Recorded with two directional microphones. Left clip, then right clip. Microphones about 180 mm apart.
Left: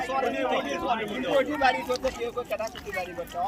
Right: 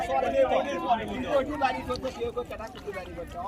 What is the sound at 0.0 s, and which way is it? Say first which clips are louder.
Speech: right 3 dB; 60° right (ahead or behind).